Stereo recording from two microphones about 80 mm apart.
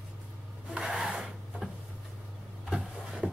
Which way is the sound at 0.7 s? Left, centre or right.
Centre.